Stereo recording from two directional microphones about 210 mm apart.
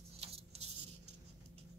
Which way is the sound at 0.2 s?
30° right (ahead or behind).